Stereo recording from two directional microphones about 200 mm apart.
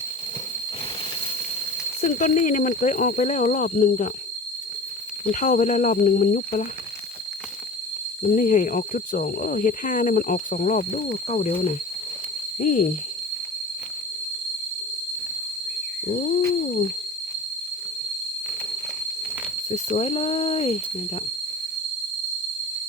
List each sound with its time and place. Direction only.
2.0 s speech: 40° left (ahead or behind)
5.2 s speech: 40° left (ahead or behind)
8.2 s speech: 40° left (ahead or behind)
16.0 s cat: 45° left (ahead or behind)
19.7 s speech: 35° left (ahead or behind)